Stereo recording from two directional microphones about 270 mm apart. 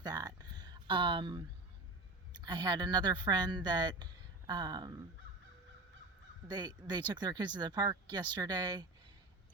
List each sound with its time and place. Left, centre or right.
0.0 s a sound: centre
2.4 s speech: centre
6.5 s speech: centre